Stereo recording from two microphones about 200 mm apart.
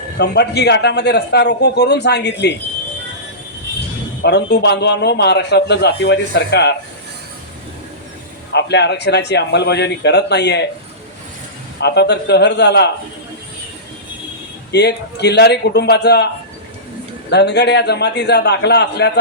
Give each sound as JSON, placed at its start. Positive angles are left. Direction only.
{"t": 0.2, "sound": "a man's voice", "side_deg": 55}
{"t": 4.2, "sound": "a man's voice", "side_deg": 55}
{"t": 8.5, "sound": "a man's voice", "side_deg": 60}
{"t": 11.8, "sound": "a man's voice", "side_deg": 55}
{"t": 14.7, "sound": "a man's voice", "side_deg": 55}